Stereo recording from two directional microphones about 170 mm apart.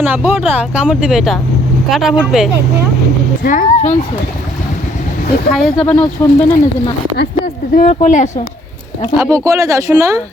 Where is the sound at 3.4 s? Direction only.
45° left (ahead or behind).